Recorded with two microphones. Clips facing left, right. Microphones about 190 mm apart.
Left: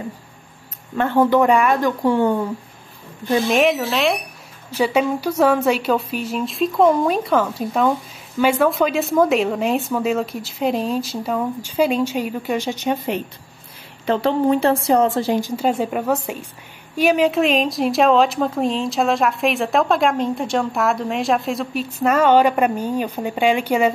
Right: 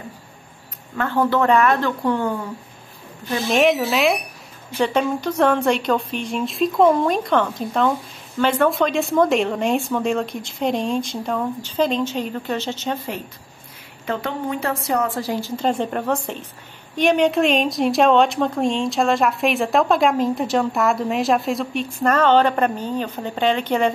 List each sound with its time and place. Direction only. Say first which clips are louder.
0.9 s a woman's voice: left 4 dB; 20° left (ahead or behind)
3.4 s speech: right 3 dB; centre (ahead or behind)
4.7 s a woman's voice: left 2 dB; 10° left (ahead or behind)
14.0 s a woman's voice: left 8 dB; 30° left (ahead or behind); by 23.9 s 10° left (ahead or behind)